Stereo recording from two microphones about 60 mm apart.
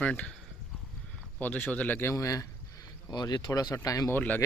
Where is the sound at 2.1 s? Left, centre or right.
Left.